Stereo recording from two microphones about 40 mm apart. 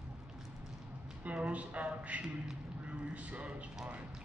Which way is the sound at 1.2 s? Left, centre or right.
Right.